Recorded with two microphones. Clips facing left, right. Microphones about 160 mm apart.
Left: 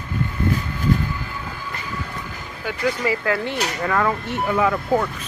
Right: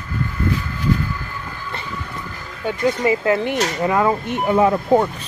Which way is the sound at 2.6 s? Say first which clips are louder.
Right 4 dB; 25° right (ahead or behind).